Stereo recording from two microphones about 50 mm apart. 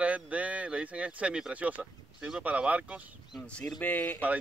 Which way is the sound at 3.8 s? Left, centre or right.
Left.